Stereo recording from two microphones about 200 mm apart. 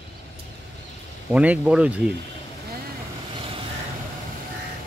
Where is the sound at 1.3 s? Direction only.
5° right (ahead or behind).